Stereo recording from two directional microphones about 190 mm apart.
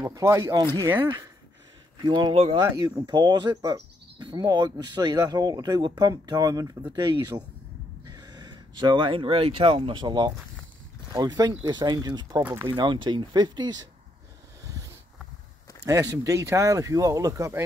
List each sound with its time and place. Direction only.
0.0 s speech: 15° right (ahead or behind)
14.6 s a sound: 20° right (ahead or behind)
15.8 s speech: 20° right (ahead or behind)